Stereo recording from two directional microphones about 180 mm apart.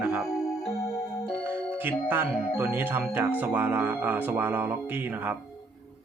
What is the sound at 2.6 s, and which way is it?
Speech, 10° right (ahead or behind).